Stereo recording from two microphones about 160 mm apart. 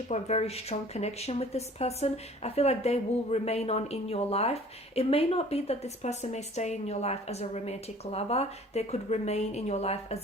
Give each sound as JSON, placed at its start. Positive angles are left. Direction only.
{"t": 0.1, "sound": "speech", "side_deg": 40}